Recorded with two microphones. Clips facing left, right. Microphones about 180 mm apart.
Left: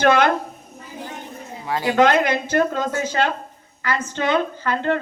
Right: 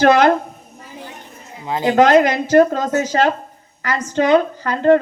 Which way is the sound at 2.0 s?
35° right (ahead or behind).